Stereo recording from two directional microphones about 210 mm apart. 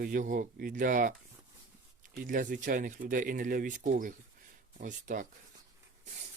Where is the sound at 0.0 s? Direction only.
40° right (ahead or behind).